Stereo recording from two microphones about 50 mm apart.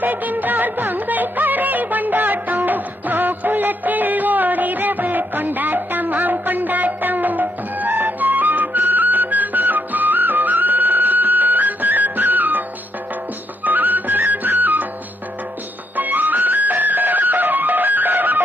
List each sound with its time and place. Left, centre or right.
0.0 s music: right
13.7 s music: right
16.0 s music: right